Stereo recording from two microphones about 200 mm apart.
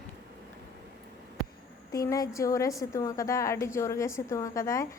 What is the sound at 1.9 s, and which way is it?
A woman's voice, 15° left (ahead or behind).